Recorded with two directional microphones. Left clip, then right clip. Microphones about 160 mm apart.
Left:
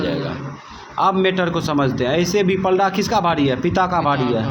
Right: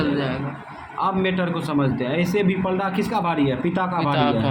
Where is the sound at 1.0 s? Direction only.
35° left (ahead or behind).